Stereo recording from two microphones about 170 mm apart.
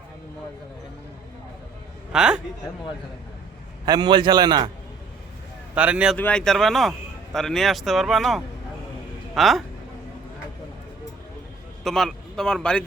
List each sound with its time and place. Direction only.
2.1 s speech: 5° right (ahead or behind)
3.8 s a man's voice: 25° right (ahead or behind)
5.7 s a man's voice: 5° right (ahead or behind)
6.1 s speech: 5° left (ahead or behind)
11.8 s a man's voice: centre (ahead or behind)